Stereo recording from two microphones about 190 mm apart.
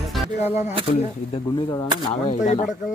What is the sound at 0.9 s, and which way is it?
Speech, 25° left (ahead or behind).